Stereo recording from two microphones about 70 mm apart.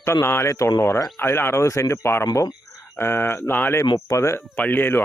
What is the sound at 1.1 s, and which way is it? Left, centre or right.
Speech, left.